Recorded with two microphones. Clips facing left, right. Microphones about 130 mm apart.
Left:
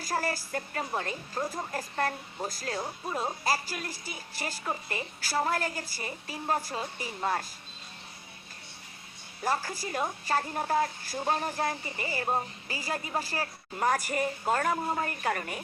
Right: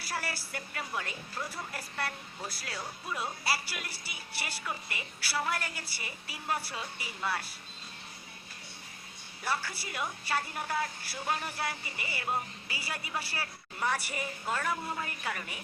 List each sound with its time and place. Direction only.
0.0 s a woman's voice: 40° left (ahead or behind)
9.4 s a woman's voice: 40° left (ahead or behind)